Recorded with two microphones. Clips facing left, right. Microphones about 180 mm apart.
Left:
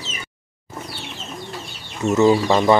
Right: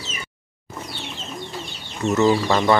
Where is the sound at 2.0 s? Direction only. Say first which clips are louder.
Left 3 dB; 10° left (ahead or behind).